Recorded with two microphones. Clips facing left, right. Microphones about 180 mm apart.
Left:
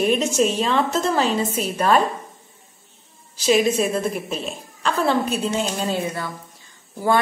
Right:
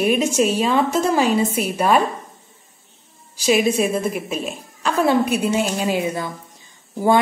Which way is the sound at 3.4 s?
10° right (ahead or behind).